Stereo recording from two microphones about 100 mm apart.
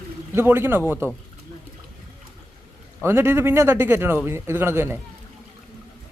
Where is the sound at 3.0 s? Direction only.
25° right (ahead or behind).